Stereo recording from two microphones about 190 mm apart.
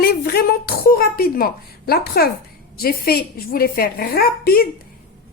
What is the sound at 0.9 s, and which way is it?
A woman's voice, 50° left (ahead or behind).